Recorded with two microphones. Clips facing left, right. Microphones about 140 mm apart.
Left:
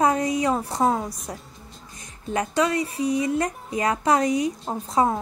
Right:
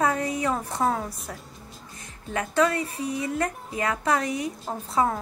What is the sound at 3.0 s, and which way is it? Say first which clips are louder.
A woman's voice: left 5 dB; 15° left (ahead or behind).